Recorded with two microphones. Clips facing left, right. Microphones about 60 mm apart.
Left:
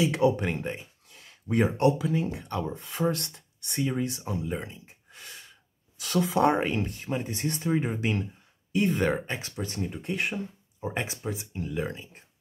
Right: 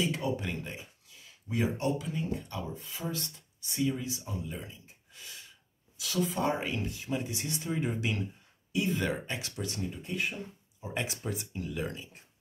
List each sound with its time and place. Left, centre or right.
0.0 s speech: left
3.8 s speech: left
6.2 s speech: left
8.7 s speech: left
9.3 s speech: left
9.8 s speech: left
10.8 s speech: left
11.2 s speech: centre